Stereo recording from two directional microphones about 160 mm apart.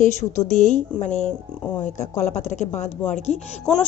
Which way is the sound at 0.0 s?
50° left (ahead or behind).